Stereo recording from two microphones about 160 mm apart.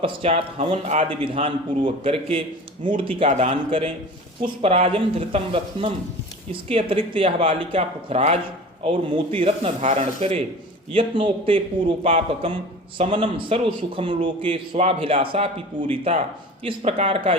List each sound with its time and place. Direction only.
0.0 s a man's voice: 40° right (ahead or behind)
3.2 s a man's voice: 45° right (ahead or behind)